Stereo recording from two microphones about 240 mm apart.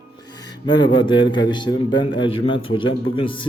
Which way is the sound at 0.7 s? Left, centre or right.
Centre.